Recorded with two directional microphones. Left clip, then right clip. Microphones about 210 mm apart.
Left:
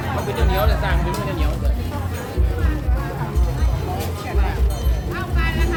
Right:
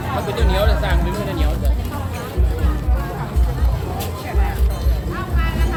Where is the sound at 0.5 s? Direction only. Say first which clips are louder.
Right 2 dB; 25° right (ahead or behind).